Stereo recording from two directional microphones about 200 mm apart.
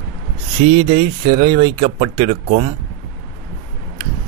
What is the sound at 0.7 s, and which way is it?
Speech, 30° right (ahead or behind).